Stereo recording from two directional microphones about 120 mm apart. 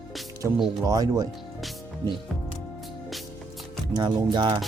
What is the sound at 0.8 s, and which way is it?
Speech, 30° right (ahead or behind).